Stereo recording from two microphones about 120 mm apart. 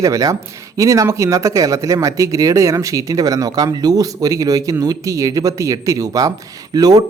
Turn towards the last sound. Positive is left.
turn(degrees=-35)  # may be behind; listen again after turning